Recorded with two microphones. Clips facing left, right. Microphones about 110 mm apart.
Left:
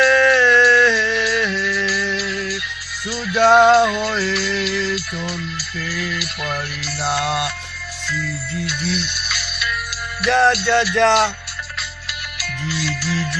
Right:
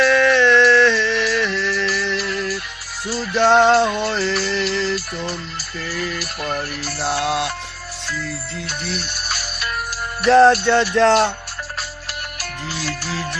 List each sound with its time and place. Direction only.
0.0 s music: 10° left (ahead or behind)
2.1 s music: 50° right (ahead or behind)
3.3 s music: 5° left (ahead or behind)
3.8 s a sound: 35° right (ahead or behind)
4.6 s music: 40° right (ahead or behind)
7.2 s music: 25° right (ahead or behind)
8.6 s music: 45° right (ahead or behind)
12.4 s music: 50° right (ahead or behind)